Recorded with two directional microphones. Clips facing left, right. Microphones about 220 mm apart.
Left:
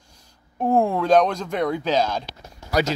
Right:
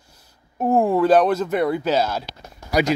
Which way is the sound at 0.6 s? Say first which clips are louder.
Right 3 dB; 5° right (ahead or behind).